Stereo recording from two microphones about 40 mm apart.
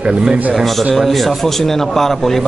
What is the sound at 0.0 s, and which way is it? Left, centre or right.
Speech, right.